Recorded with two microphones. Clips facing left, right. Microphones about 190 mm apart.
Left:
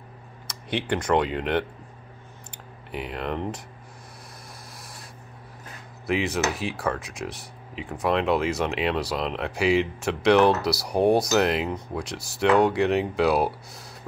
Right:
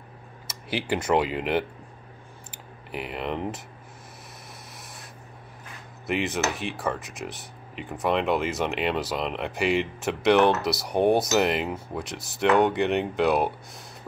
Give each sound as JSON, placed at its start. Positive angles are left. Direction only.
{"t": 0.5, "sound": "speech", "side_deg": -5}
{"t": 6.0, "sound": "speech", "side_deg": 0}